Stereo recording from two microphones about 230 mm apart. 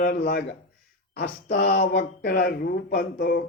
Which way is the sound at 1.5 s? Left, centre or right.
Left.